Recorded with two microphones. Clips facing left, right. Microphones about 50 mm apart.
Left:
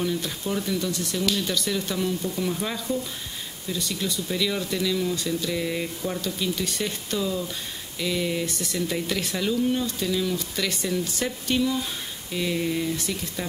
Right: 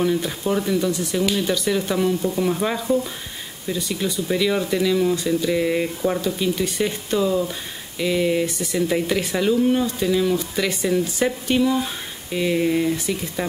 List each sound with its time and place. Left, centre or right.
0.0 s speech: centre